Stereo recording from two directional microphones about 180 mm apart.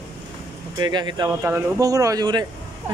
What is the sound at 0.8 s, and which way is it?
Speech, 25° right (ahead or behind).